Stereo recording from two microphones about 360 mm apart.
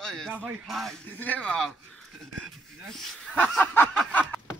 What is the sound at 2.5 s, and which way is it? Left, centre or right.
Snicker, centre.